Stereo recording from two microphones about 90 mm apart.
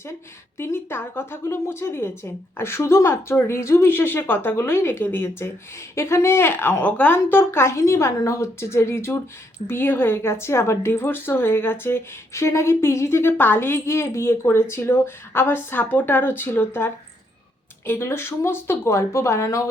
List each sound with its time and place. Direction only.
0.6 s speech: 25° left (ahead or behind)